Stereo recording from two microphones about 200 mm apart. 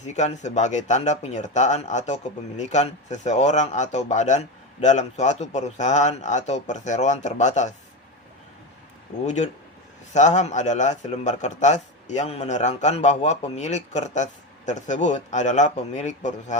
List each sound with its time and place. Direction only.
0.0 s a man's voice: 35° left (ahead or behind)
9.2 s a man's voice: 35° left (ahead or behind)